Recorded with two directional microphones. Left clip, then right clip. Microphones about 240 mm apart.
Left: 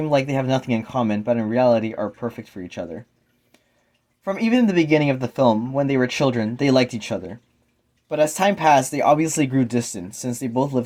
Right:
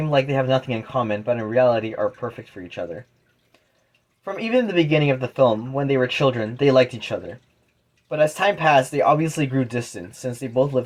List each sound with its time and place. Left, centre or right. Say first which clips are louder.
0.0 s speech: even; left
4.2 s speech: left 1 dB; left